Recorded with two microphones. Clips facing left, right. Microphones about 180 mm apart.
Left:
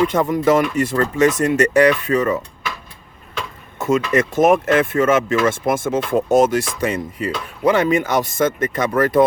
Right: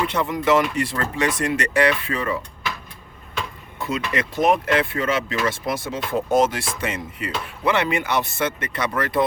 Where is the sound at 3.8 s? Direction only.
45° left (ahead or behind).